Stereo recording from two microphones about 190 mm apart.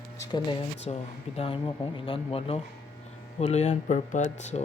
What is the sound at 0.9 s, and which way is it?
Speech, 35° left (ahead or behind).